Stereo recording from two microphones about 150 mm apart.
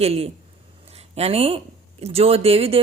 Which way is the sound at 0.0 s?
45° right (ahead or behind).